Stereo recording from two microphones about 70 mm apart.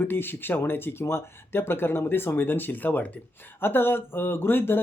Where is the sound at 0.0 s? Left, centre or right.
Left.